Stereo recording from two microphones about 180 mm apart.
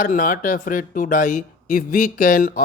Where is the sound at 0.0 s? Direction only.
50° left (ahead or behind).